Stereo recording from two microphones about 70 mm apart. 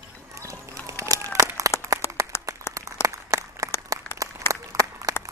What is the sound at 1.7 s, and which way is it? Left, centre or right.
Clapping, left.